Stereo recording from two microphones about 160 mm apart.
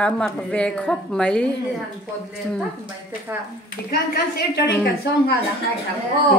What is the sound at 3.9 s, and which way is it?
Speech, 80° left.